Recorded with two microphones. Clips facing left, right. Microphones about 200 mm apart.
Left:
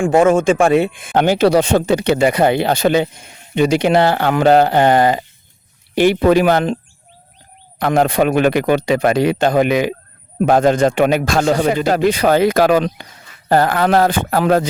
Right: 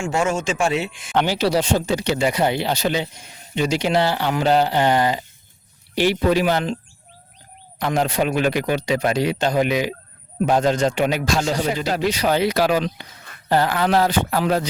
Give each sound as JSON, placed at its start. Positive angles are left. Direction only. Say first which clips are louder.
{"t": 0.0, "sound": "speech", "louder": "left 10 dB", "side_deg": 55}
{"t": 7.8, "sound": "speech", "louder": "left 6 dB", "side_deg": 55}